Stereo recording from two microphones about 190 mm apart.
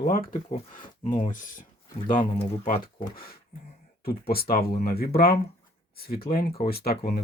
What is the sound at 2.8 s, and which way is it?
Speech, 50° left (ahead or behind).